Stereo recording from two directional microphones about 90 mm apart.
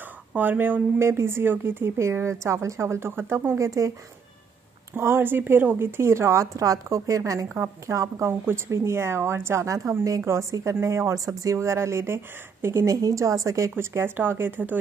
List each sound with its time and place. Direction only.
0.3 s speech: 20° right (ahead or behind); by 3.9 s 35° right (ahead or behind)
4.9 s speech: 25° right (ahead or behind)